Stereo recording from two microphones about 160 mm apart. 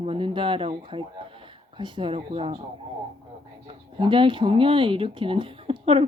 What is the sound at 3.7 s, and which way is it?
Speech, 30° right (ahead or behind).